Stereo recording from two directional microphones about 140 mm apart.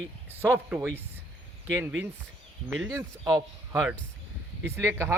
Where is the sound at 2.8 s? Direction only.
25° right (ahead or behind).